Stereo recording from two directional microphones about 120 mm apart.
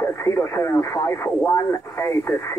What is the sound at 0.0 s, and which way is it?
Speech, 20° left (ahead or behind).